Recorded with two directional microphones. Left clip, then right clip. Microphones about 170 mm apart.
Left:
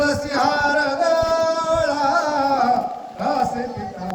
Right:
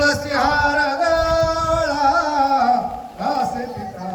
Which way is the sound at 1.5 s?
45° left (ahead or behind).